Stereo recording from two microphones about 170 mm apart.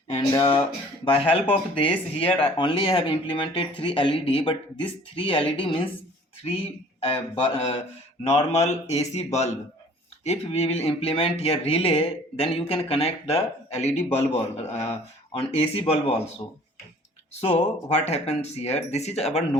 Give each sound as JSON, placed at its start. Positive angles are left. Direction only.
{"t": 0.1, "sound": "speech", "side_deg": 30}
{"t": 17.4, "sound": "speech", "side_deg": 40}